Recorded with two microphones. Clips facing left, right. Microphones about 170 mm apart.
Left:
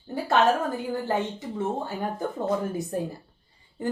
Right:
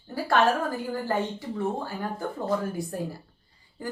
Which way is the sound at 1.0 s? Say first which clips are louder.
Left 1 dB; 20° left (ahead or behind).